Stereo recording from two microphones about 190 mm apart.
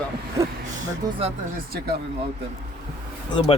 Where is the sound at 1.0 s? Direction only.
20° right (ahead or behind).